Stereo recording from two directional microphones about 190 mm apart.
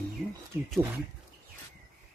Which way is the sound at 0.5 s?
10° right (ahead or behind).